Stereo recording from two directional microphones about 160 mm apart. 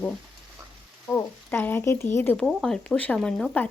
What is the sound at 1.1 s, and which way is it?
Speech, 10° left (ahead or behind).